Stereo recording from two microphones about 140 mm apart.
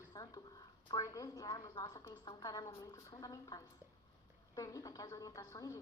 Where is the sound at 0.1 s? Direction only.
30° left (ahead or behind).